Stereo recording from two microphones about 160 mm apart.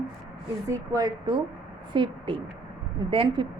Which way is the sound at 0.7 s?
25° right (ahead or behind).